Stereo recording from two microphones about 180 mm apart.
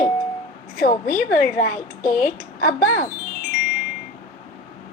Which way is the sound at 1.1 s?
50° left (ahead or behind).